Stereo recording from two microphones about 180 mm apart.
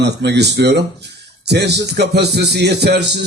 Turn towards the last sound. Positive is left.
turn(degrees=-65)  # may be behind; listen again after turning